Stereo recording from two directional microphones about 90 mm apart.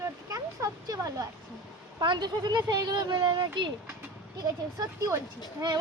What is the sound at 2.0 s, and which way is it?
Speech, 55° right (ahead or behind).